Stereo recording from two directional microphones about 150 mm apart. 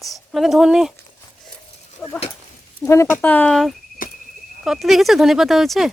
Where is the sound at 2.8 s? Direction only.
20° left (ahead or behind); by 3.8 s centre (ahead or behind).